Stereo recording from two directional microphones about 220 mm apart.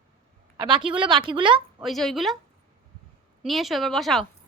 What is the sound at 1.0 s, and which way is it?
Speech, 20° right (ahead or behind).